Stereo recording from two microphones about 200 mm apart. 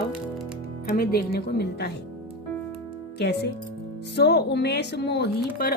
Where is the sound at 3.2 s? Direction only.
55° left (ahead or behind).